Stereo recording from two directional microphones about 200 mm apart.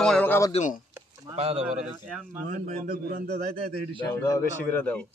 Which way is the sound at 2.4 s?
40° right (ahead or behind).